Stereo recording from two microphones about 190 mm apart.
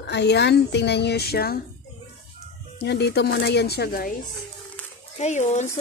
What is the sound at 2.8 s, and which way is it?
Speech, 60° left (ahead or behind).